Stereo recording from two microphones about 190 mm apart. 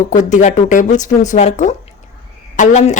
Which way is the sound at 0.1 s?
40° left (ahead or behind).